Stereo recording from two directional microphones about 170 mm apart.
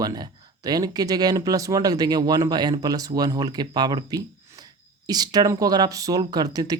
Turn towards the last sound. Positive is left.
turn(degrees=-20)  # may be behind; listen again after turning